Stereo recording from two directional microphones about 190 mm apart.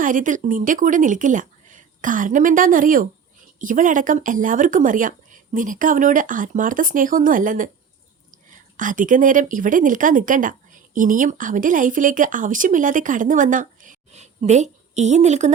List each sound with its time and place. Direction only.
0.0 s speech: 45° right (ahead or behind)